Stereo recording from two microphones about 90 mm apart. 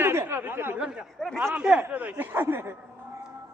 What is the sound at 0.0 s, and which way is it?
Chatter, 25° right (ahead or behind).